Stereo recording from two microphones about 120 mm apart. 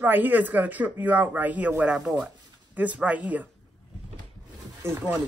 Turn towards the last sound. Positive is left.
turn(degrees=-15)  # may be behind; listen again after turning